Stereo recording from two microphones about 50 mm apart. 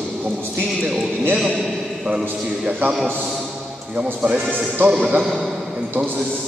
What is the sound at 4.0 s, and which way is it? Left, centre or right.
Speech, right.